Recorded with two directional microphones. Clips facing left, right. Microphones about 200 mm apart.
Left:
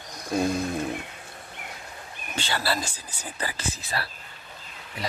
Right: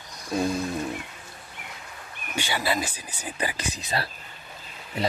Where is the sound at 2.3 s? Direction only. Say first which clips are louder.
Right 1 dB; 15° right (ahead or behind).